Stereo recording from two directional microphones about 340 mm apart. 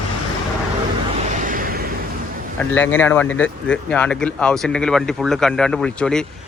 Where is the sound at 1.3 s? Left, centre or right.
Right.